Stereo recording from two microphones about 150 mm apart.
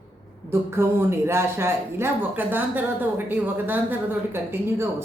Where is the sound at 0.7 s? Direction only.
15° right (ahead or behind).